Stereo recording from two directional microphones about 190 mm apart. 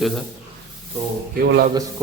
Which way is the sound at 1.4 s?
55° right (ahead or behind).